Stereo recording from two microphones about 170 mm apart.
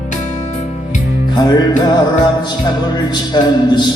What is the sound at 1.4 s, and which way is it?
Music, 25° left (ahead or behind).